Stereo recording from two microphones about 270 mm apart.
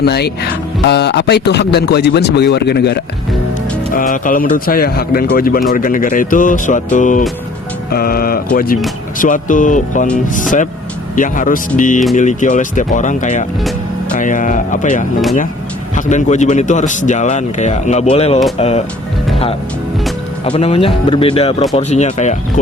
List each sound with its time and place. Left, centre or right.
0.0 s a man's voice: left
11.1 s speech: left
20.4 s speech: left